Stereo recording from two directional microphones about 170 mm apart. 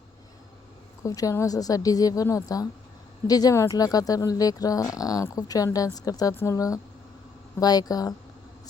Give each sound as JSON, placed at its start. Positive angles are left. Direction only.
{"t": 1.0, "sound": "speech", "side_deg": 20}